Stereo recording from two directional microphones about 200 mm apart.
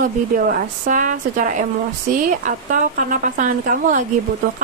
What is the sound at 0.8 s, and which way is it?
A woman's voice, 40° right (ahead or behind).